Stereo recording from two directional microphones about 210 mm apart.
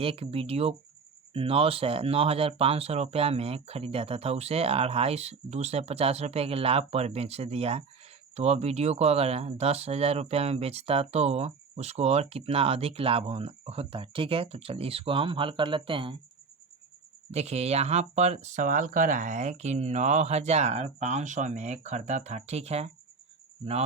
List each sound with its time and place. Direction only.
0.0 s speech: 25° right (ahead or behind)
17.3 s speech: 30° right (ahead or behind)